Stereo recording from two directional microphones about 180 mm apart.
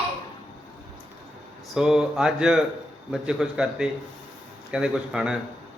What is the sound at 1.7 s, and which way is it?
Speech, 5° right (ahead or behind).